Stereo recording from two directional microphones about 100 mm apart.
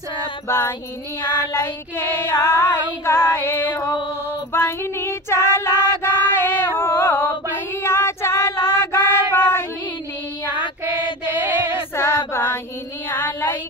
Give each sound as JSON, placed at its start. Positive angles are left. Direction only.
{"t": 0.5, "sound": "child singing", "side_deg": 25}
{"t": 6.2, "sound": "female singing", "side_deg": 25}
{"t": 11.9, "sound": "chant", "side_deg": 25}
{"t": 13.1, "sound": "a sound", "side_deg": 25}